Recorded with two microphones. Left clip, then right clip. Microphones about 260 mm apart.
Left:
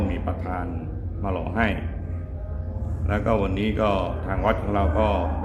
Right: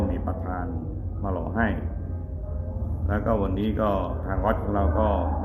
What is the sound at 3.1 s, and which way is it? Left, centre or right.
A man's voice, centre.